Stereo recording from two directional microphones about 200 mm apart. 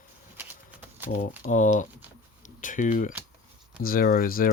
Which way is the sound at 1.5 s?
40° left (ahead or behind).